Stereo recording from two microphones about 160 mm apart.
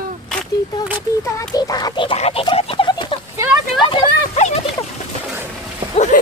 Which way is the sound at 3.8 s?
35° left (ahead or behind).